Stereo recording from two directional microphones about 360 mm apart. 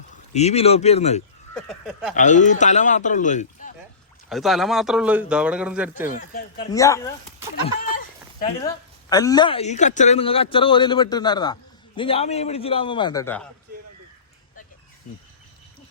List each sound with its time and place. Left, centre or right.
0.3 s a man's voice: centre
1.5 s a man's voice: centre
2.1 s a man's voice: centre
4.3 s a man's voice: centre
6.6 s a man's voice: centre